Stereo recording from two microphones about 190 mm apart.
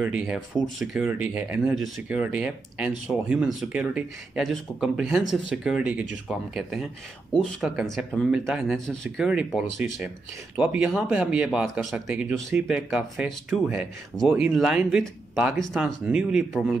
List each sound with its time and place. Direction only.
0.0 s speech: 5° right (ahead or behind)